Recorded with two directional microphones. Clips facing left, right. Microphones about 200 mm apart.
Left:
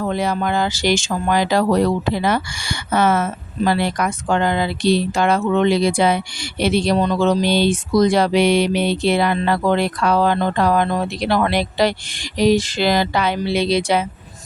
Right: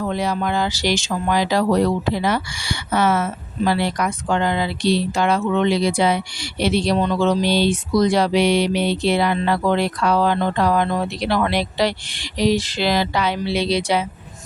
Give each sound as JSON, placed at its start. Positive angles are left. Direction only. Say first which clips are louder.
{"t": 0.0, "sound": "speech", "louder": "left 2 dB", "side_deg": 50}